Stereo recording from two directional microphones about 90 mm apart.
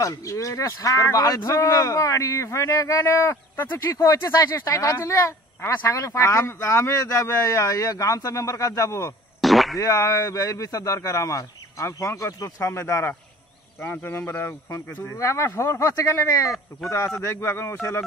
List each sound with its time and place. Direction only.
0.0 s speech: 35° left (ahead or behind)
3.9 s speech: 40° left (ahead or behind)
9.4 s radio: centre (ahead or behind)
9.8 s a man's voice: 40° left (ahead or behind)